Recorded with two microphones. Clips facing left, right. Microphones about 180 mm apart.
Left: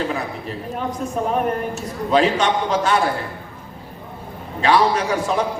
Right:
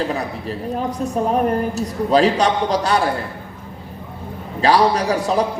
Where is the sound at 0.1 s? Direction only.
35° right (ahead or behind).